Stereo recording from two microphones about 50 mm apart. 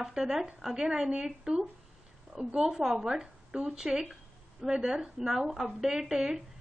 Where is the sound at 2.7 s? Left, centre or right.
Centre.